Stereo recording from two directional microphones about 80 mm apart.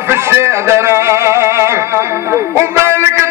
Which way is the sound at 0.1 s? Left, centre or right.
Right.